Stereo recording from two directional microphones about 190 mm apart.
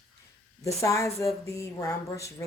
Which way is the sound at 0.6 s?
15° left (ahead or behind).